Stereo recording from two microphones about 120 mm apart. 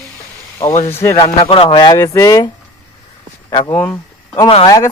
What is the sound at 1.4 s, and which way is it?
Speech, 50° left (ahead or behind).